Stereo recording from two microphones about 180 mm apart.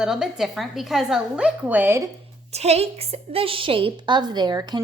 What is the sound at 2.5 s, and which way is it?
A woman's voice, 35° right (ahead or behind).